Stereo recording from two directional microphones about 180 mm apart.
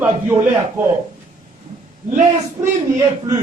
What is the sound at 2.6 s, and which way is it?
Speech, 20° right (ahead or behind).